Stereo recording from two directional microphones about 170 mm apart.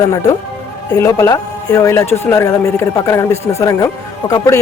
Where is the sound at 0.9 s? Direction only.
20° left (ahead or behind).